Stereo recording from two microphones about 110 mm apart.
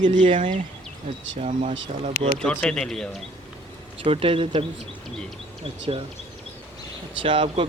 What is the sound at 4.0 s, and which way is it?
Speech, 60° right (ahead or behind).